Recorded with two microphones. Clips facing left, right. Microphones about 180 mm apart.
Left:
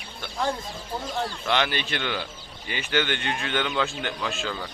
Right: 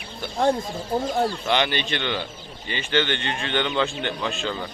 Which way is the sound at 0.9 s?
45° right (ahead or behind).